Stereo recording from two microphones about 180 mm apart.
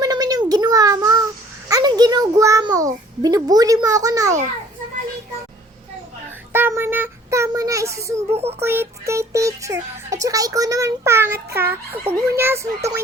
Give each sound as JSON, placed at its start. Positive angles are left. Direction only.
{"t": 0.0, "sound": "a sound", "side_deg": -20}
{"t": 1.6, "sound": "a child's voice", "side_deg": -20}
{"t": 6.5, "sound": "child singing", "side_deg": -10}
{"t": 8.4, "sound": "speech", "side_deg": -35}
{"t": 8.6, "sound": "speech", "side_deg": -15}